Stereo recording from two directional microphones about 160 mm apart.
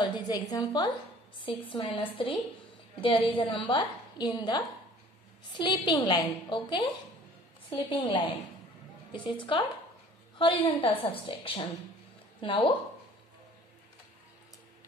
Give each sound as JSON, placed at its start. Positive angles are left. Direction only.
{"t": 0.0, "sound": "a woman's voice", "side_deg": 25}